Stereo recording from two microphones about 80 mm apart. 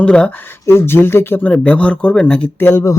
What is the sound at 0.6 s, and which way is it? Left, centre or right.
Speech, left.